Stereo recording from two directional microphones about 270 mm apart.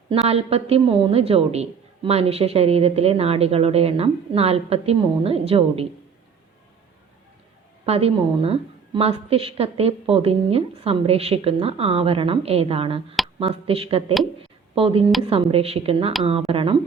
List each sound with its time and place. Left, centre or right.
0.1 s a woman's voice: right
7.9 s a woman's voice: right